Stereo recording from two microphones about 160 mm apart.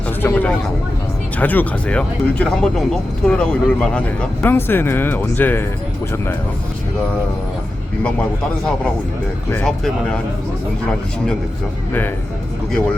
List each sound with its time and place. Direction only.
0.2 s a sound: 10° left (ahead or behind)
1.4 s speech: 10° left (ahead or behind)
9.5 s speech: 10° left (ahead or behind)